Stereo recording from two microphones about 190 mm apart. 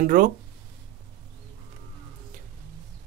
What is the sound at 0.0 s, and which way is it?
Speech, 50° right (ahead or behind).